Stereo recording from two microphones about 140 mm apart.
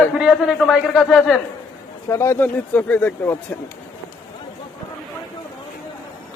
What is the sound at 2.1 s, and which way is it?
Speech, 20° left (ahead or behind).